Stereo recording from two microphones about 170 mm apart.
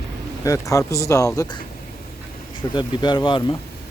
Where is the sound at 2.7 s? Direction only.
25° left (ahead or behind).